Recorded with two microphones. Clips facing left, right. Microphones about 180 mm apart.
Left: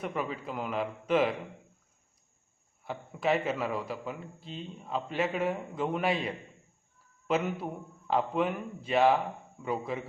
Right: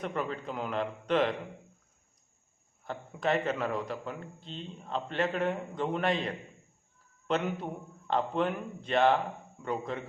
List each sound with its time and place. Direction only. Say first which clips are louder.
0.0 s a man's voice: even; 5° left (ahead or behind)
2.8 s a man's voice: left 1 dB; 5° left (ahead or behind)